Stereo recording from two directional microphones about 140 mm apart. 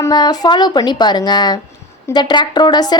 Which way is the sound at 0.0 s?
30° left (ahead or behind).